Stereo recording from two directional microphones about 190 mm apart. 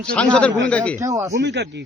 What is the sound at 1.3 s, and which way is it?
Speech, 65° right (ahead or behind).